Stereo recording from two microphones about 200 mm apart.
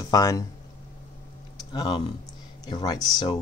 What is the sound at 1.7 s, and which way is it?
Typing, 20° left (ahead or behind).